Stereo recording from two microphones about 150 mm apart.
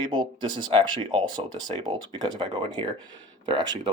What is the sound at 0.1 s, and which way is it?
Speech, 30° right (ahead or behind).